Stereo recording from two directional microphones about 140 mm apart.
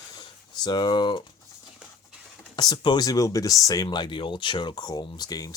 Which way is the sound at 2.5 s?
30° left (ahead or behind).